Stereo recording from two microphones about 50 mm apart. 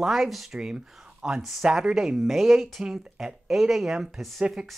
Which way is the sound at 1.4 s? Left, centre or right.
Centre.